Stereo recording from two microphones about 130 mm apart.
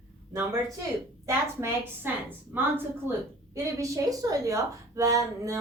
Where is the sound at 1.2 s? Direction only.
20° right (ahead or behind).